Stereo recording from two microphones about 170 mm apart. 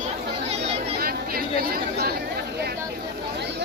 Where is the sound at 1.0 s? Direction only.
60° right (ahead or behind).